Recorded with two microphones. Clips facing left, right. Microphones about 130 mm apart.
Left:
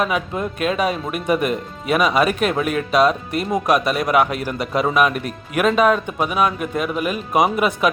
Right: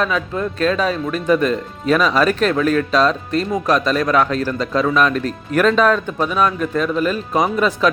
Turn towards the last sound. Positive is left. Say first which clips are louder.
# even
turn(degrees=10)  # may be behind; listen again after turning